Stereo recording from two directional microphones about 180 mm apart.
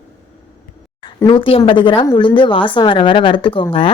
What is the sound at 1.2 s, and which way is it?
Speech, 30° left (ahead or behind).